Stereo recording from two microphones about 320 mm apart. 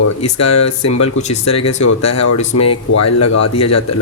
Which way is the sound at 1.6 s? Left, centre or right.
Left.